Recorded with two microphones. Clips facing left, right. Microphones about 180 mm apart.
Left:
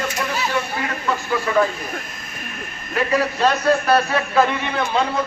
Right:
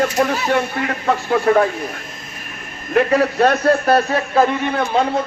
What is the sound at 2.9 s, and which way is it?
A man's voice, 55° right (ahead or behind).